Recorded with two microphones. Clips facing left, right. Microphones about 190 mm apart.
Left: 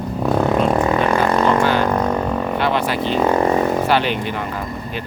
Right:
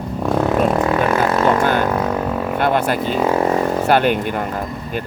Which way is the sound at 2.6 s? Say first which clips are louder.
Right 4 dB; 50° right (ahead or behind).